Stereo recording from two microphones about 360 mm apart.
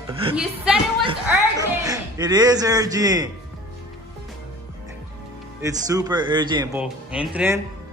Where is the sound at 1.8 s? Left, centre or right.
Centre.